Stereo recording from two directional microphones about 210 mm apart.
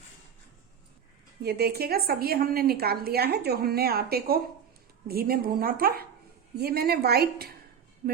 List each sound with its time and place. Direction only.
1.4 s a woman's voice: 50° right (ahead or behind)